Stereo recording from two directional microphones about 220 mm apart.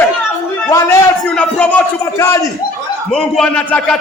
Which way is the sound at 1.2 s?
5° left (ahead or behind).